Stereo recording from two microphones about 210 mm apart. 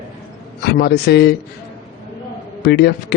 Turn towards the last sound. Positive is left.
turn(degrees=50)  # may be behind; listen again after turning